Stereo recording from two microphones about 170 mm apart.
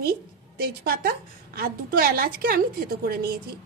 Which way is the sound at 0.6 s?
65° right (ahead or behind).